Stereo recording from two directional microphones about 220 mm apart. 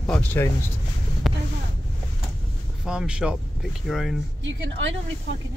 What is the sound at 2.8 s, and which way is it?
Speech, 5° right (ahead or behind).